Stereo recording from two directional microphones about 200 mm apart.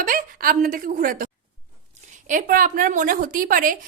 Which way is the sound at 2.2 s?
40° right (ahead or behind).